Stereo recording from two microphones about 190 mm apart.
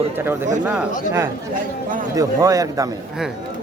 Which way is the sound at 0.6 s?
10° right (ahead or behind).